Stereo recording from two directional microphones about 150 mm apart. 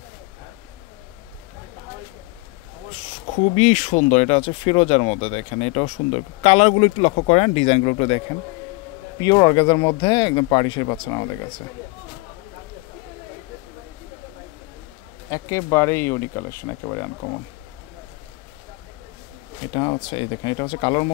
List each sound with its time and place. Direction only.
2.9 s speech: 45° left (ahead or behind)
9.2 s speech: 25° left (ahead or behind)
15.2 s speech: 20° left (ahead or behind)
19.7 s speech: 35° left (ahead or behind)